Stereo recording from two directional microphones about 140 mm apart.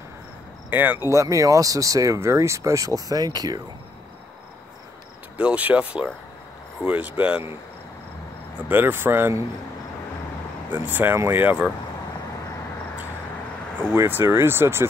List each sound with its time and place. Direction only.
0.7 s speech: 15° right (ahead or behind)
5.4 s speech: 10° right (ahead or behind)
8.6 s speech: 15° right (ahead or behind)
10.7 s speech: 15° right (ahead or behind)
13.9 s speech: 15° right (ahead or behind)